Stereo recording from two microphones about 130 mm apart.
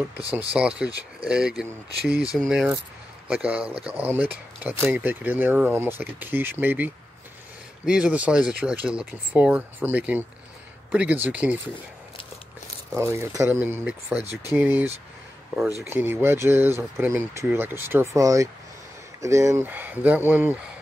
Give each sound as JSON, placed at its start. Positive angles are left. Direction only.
{"t": 0.5, "sound": "speech", "side_deg": -5}
{"t": 12.9, "sound": "speech", "side_deg": -20}
{"t": 15.9, "sound": "speech", "side_deg": -15}